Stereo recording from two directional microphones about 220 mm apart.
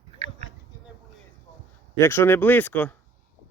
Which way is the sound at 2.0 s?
10° left (ahead or behind).